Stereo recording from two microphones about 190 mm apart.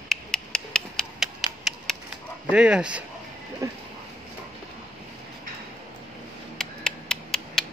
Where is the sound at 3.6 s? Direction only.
15° right (ahead or behind).